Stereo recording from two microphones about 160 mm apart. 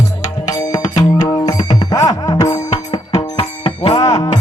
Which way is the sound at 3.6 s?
35° left (ahead or behind).